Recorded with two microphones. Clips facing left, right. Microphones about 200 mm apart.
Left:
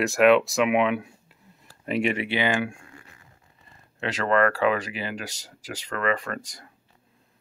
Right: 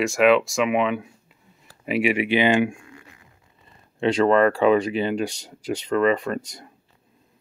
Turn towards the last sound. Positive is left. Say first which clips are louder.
# right 6 dB
turn(degrees=-25)  # may be behind; listen again after turning